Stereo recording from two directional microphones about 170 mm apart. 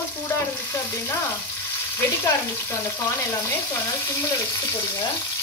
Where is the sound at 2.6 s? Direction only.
15° left (ahead or behind).